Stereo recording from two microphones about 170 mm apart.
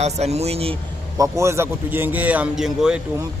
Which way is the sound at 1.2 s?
15° right (ahead or behind).